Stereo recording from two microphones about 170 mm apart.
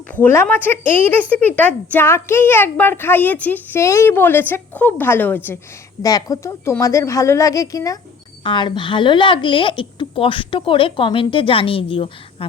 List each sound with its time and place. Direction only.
0.1 s speech: 10° left (ahead or behind)
6.0 s a woman's voice: 20° left (ahead or behind)